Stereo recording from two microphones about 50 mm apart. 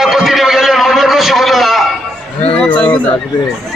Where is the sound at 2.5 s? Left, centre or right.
Left.